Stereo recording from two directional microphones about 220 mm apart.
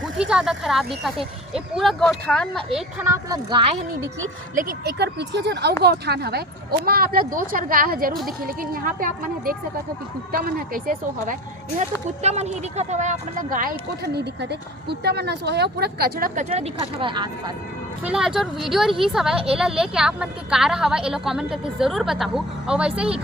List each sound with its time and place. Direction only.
0.0 s a woman's voice: 5° right (ahead or behind)
3.1 s a woman's voice: 15° right (ahead or behind)
4.5 s speech: 50° right (ahead or behind); by 17.2 s 20° right (ahead or behind)
18.0 s a woman's voice: 5° right (ahead or behind)